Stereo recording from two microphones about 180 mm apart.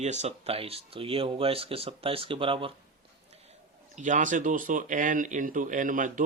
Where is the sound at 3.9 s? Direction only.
45° right (ahead or behind).